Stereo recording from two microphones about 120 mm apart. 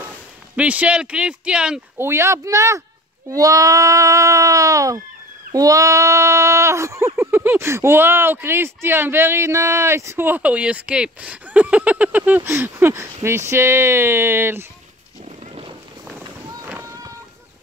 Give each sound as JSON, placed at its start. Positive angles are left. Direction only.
{"t": 0.6, "sound": "speech", "side_deg": -10}
{"t": 2.0, "sound": "speech", "side_deg": -20}
{"t": 15.2, "sound": "wild animals", "side_deg": -55}
{"t": 16.1, "sound": "run", "side_deg": -10}
{"t": 16.8, "sound": "boat", "side_deg": -30}